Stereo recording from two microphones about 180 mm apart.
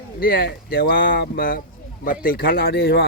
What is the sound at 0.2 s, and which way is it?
Speech, 55° left (ahead or behind).